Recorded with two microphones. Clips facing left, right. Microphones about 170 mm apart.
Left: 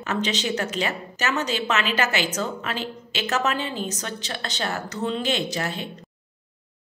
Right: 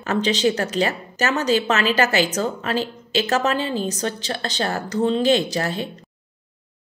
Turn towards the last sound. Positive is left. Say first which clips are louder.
# right 5 dB
turn(degrees=-35)  # may be behind; listen again after turning